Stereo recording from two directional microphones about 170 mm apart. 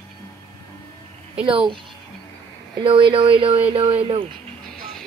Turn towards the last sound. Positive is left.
turn(degrees=-30)  # may be behind; listen again after turning